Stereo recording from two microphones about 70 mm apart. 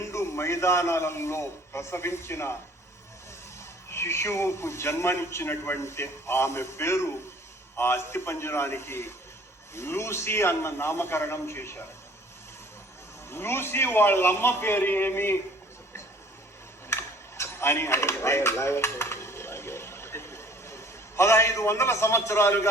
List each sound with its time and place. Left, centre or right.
0.0 s a man's voice: left
3.8 s a man's voice: left
13.3 s a man's voice: left
16.9 s a sound: left